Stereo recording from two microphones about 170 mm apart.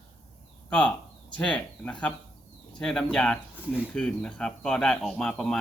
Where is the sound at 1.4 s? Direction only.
5° left (ahead or behind).